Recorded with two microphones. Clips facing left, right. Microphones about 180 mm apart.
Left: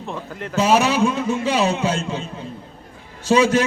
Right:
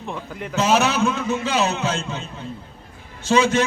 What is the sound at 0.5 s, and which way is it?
A man's voice, 10° left (ahead or behind).